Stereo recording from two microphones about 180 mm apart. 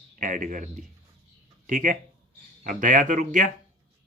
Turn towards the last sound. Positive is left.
turn(degrees=-45)  # may be behind; listen again after turning